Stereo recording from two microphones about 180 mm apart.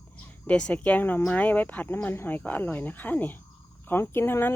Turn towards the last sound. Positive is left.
turn(degrees=10)  # may be behind; listen again after turning